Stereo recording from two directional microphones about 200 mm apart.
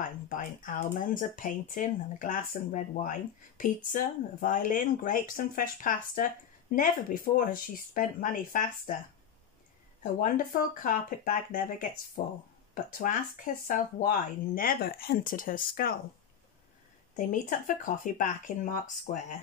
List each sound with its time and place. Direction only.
0.0 s speech: 40° left (ahead or behind)
10.2 s speech: 40° left (ahead or behind)
17.3 s speech: 40° left (ahead or behind)